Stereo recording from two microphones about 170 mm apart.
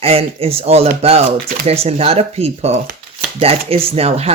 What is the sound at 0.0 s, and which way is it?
Speech, 35° right (ahead or behind).